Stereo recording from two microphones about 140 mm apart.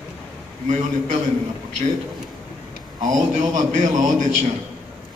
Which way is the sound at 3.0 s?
65° right (ahead or behind).